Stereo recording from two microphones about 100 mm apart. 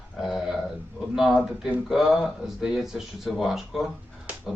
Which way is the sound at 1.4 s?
5° right (ahead or behind).